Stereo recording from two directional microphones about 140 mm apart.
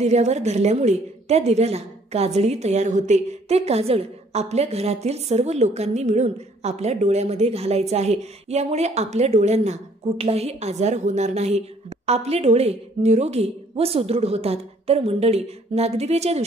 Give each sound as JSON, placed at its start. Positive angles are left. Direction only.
{"t": 0.0, "sound": "a woman's voice", "side_deg": -50}